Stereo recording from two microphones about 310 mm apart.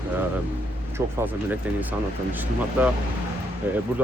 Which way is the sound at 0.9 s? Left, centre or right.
Centre.